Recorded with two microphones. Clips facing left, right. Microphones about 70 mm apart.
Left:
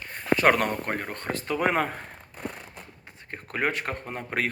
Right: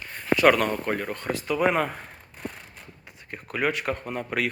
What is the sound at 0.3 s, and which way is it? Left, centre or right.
Speech, left.